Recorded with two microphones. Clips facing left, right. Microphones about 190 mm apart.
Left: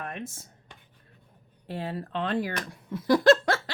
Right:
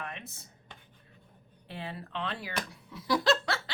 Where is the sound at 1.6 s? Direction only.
45° left (ahead or behind).